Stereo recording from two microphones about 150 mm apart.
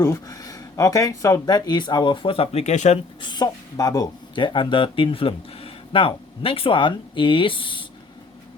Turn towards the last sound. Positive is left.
turn(degrees=35)  # may be behind; listen again after turning